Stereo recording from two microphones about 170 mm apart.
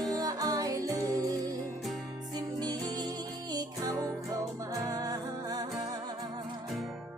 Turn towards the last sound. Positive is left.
turn(degrees=-20)  # may be behind; listen again after turning